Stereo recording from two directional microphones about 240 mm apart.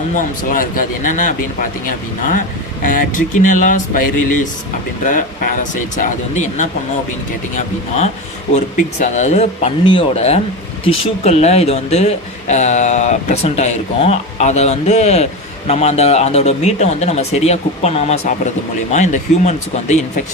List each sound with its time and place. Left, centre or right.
0.2 s music: left
7.5 s speech: left